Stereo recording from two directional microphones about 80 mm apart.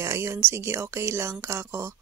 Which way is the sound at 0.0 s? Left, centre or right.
Right.